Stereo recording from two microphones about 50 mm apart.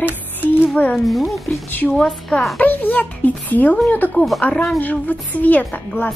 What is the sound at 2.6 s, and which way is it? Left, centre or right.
A woman's voice, left.